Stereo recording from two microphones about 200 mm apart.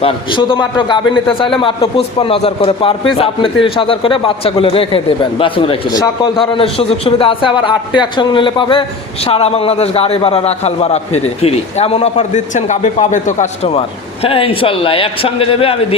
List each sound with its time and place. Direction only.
0.0 s a man's voice: 25° left (ahead or behind)